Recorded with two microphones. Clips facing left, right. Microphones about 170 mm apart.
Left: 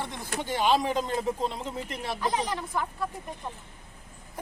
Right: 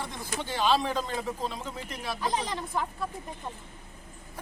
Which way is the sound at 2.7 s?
20° right (ahead or behind).